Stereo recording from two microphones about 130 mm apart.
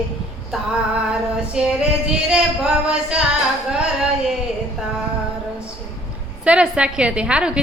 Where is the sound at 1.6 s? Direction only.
5° right (ahead or behind).